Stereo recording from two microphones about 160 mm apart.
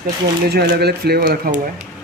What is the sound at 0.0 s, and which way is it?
Speech, 85° right.